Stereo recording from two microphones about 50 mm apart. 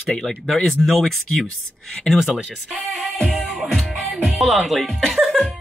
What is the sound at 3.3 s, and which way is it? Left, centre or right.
Music, centre.